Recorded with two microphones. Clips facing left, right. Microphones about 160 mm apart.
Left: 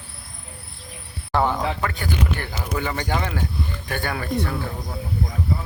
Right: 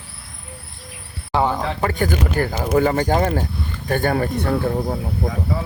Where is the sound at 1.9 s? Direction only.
45° right (ahead or behind).